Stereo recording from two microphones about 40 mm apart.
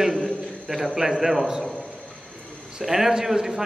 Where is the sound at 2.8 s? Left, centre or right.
Centre.